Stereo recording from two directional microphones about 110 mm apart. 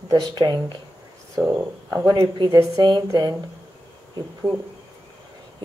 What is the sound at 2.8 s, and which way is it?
Speech, 40° right (ahead or behind).